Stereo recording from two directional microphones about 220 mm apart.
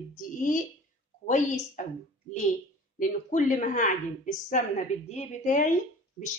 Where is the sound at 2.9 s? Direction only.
35° left (ahead or behind).